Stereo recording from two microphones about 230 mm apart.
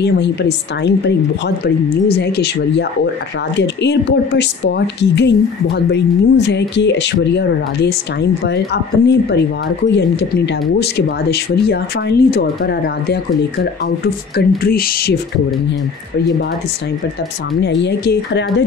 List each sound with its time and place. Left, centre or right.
0.0 s speech: left
17.6 s speech: left